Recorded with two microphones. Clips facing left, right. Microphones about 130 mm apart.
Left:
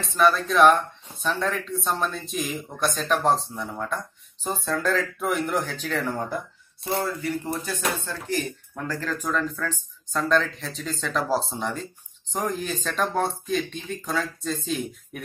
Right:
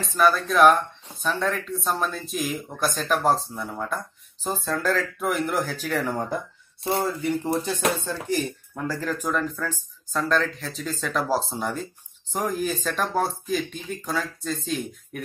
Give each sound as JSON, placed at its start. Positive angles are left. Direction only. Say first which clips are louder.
{"t": 0.0, "sound": "speech", "louder": "even", "side_deg": 0}
{"t": 7.4, "sound": "music", "louder": "right 5 dB", "side_deg": -20}
{"t": 8.0, "sound": "speech", "louder": "right 2 dB", "side_deg": -15}